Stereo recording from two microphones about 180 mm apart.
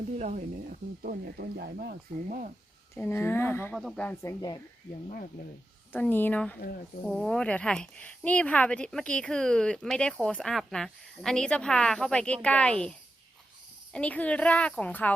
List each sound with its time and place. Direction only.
0.2 s speech: 45° right (ahead or behind)
2.9 s a woman's voice: 15° left (ahead or behind)
3.8 s speech: 5° left (ahead or behind)
4.2 s speech: 20° left (ahead or behind)
5.9 s a woman's voice: 10° left (ahead or behind)